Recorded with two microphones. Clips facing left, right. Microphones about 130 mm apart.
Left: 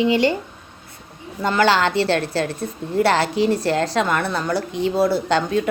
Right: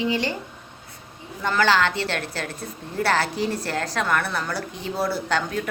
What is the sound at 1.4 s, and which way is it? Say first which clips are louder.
A woman's voice: left 3 dB; 25° left (ahead or behind).